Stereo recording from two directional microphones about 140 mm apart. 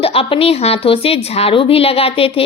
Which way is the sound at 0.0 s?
40° left (ahead or behind).